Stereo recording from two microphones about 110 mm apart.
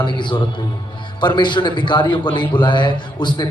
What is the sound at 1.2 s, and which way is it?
A man's voice, 45° left (ahead or behind).